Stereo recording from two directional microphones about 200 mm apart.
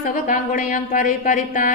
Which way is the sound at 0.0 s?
40° left (ahead or behind).